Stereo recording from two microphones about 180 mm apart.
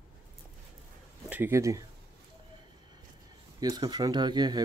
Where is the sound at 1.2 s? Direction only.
10° right (ahead or behind).